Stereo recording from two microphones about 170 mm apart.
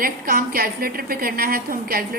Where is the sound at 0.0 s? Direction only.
60° right (ahead or behind).